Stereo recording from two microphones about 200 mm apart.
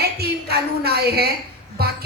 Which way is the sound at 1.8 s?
50° right (ahead or behind).